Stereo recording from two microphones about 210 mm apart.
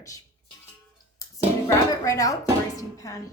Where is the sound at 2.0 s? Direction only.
15° left (ahead or behind).